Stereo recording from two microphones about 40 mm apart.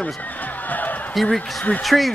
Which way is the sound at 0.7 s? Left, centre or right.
Left.